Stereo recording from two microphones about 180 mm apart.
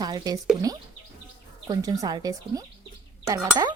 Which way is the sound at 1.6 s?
20° right (ahead or behind).